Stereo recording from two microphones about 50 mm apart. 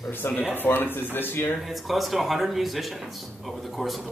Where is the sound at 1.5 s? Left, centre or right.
Centre.